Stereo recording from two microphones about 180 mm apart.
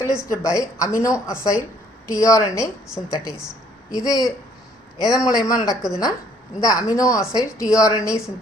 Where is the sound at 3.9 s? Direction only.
20° left (ahead or behind).